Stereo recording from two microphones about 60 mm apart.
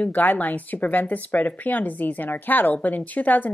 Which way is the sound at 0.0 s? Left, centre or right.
Left.